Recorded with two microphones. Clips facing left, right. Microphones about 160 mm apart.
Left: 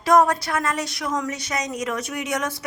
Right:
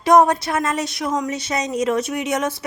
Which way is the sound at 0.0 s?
20° right (ahead or behind).